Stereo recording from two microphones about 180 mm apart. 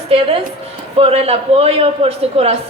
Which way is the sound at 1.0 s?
30° right (ahead or behind).